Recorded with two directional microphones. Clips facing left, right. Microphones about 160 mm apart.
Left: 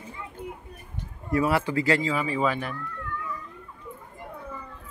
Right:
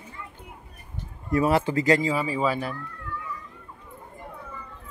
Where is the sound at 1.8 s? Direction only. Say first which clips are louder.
Right 2 dB; 40° right (ahead or behind).